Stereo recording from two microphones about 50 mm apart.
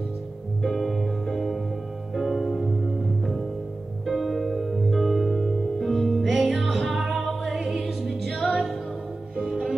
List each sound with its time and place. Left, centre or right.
0.6 s music: centre
4.0 s music: centre
9.5 s music: centre